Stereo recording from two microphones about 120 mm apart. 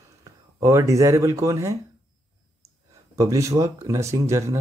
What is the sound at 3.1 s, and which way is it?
Speech, 25° right (ahead or behind).